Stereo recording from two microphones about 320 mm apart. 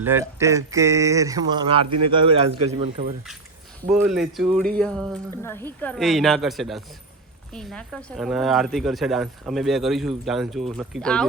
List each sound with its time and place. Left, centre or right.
0.0 s speech: centre
3.8 s speech: centre